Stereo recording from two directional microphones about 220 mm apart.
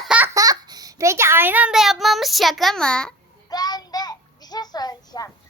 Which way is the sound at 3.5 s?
15° left (ahead or behind).